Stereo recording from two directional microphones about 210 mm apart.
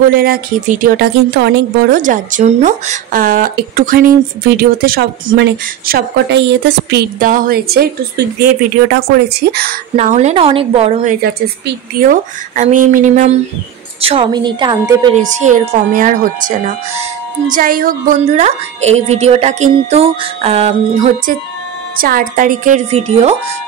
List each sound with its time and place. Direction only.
0.1 s a woman's voice: 45° right (ahead or behind)
2.0 s a woman's voice: 40° right (ahead or behind)
8.9 s a woman's voice: 50° right (ahead or behind)
9.9 s a woman's voice: 35° right (ahead or behind)
11.2 s speech: 50° right (ahead or behind)
14.0 s a woman's voice: 25° right (ahead or behind)
15.3 s speech: 35° right (ahead or behind)
21.9 s speech: 45° right (ahead or behind)